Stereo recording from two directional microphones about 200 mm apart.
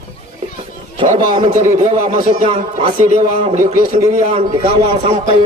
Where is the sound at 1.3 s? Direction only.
35° right (ahead or behind).